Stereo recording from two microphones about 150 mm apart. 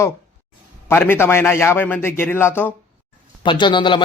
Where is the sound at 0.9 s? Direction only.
15° left (ahead or behind).